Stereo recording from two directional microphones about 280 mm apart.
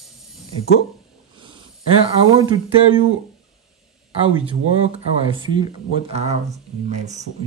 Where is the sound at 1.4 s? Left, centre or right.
Centre.